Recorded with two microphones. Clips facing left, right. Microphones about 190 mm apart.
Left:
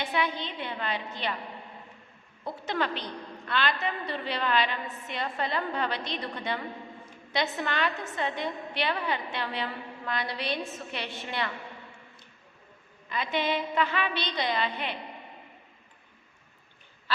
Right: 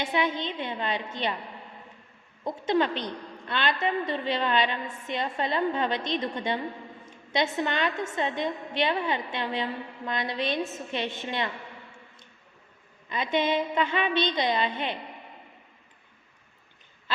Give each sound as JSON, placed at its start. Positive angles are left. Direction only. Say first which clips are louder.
{"t": 0.0, "sound": "a woman's voice", "louder": "right 3 dB", "side_deg": -25}
{"t": 2.4, "sound": "a woman's voice", "louder": "right 6 dB", "side_deg": -20}
{"t": 13.1, "sound": "a woman's voice", "louder": "right 3 dB", "side_deg": -25}